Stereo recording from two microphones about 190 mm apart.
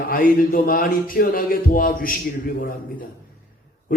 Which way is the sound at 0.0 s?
45° left (ahead or behind).